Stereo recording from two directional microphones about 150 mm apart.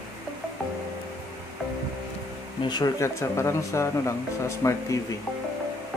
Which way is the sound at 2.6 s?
30° left (ahead or behind).